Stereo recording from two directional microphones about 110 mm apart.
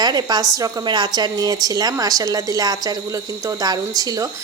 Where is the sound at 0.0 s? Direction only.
40° right (ahead or behind).